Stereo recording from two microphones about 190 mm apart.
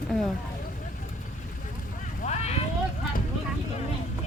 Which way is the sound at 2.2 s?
35° left (ahead or behind).